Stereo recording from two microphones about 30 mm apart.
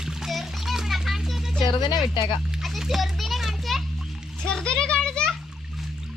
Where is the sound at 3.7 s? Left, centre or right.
Centre.